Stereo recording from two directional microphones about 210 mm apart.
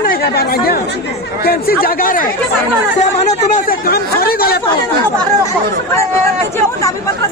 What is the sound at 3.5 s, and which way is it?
Speech, 45° left (ahead or behind).